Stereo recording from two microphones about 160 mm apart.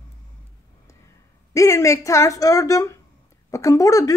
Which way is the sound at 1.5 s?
20° left (ahead or behind).